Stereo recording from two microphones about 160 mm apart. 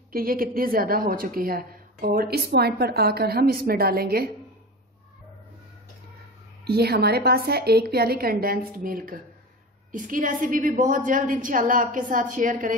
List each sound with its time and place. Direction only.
0.1 s a woman's voice: 65° right (ahead or behind)
6.6 s a woman's voice: 85° right; by 12.7 s 55° right (ahead or behind)